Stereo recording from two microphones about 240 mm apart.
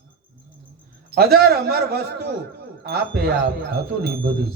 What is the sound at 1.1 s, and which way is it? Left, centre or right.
A man's voice, right.